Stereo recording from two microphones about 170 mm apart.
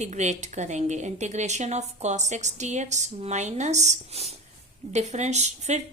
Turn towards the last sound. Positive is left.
turn(degrees=-40)  # may be behind; listen again after turning